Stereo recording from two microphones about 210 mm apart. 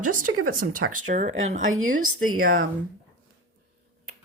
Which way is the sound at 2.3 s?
40° right (ahead or behind).